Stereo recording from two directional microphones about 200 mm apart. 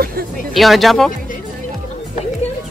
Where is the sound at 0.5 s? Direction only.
Centre (ahead or behind).